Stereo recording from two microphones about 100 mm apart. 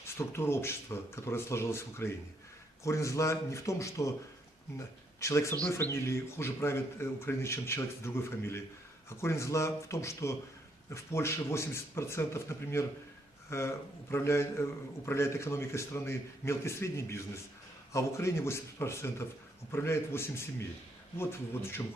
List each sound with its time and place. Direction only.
0.0 s a man's voice: 25° left (ahead or behind)
5.2 s a man's voice: 30° left (ahead or behind)